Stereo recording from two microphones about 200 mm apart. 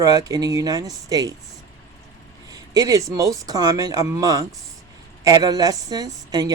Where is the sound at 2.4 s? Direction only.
20° right (ahead or behind).